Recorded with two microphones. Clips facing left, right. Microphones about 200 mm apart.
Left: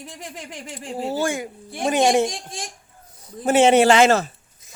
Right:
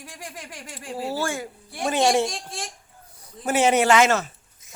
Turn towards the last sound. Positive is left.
turn(degrees=35)  # may be behind; listen again after turning